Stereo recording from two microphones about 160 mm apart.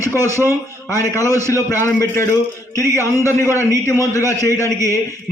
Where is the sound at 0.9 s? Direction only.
20° left (ahead or behind).